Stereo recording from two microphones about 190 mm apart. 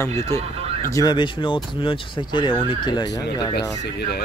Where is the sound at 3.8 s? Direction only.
60° left (ahead or behind).